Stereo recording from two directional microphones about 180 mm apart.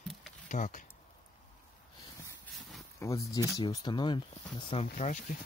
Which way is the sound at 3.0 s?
15° left (ahead or behind).